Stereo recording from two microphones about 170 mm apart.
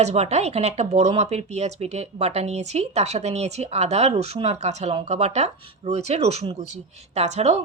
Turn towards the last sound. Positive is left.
turn(degrees=-40)  # may be behind; listen again after turning